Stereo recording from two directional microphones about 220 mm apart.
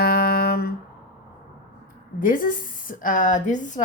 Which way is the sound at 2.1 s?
35° left (ahead or behind).